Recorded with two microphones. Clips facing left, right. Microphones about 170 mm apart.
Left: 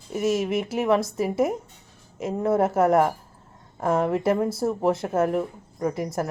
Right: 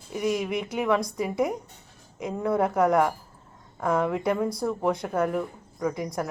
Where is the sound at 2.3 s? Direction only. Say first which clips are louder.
Left 4 dB; 30° left (ahead or behind).